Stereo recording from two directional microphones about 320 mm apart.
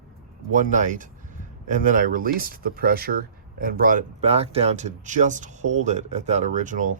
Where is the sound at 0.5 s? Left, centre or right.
Right.